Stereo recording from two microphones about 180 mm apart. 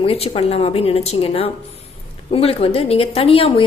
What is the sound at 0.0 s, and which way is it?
A woman's voice, 35° left (ahead or behind).